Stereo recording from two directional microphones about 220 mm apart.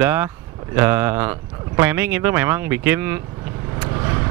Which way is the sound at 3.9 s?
15° right (ahead or behind).